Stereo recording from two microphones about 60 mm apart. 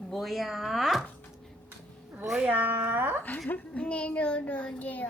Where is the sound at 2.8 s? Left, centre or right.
Right.